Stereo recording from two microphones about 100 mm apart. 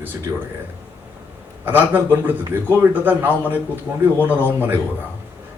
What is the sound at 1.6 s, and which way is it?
Speech, 20° right (ahead or behind).